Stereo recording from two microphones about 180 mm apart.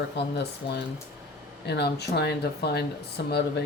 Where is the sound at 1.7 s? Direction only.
70° left (ahead or behind).